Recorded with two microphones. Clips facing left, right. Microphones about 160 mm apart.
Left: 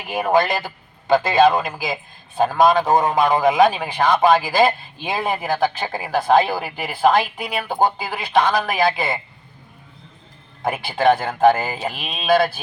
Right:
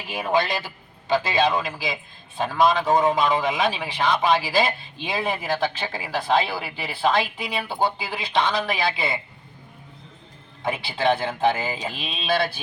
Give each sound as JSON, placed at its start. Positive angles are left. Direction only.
{"t": 0.0, "sound": "a man's voice", "side_deg": 50}
{"t": 10.6, "sound": "a man's voice", "side_deg": 45}